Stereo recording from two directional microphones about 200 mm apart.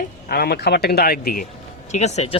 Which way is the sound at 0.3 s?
50° left (ahead or behind).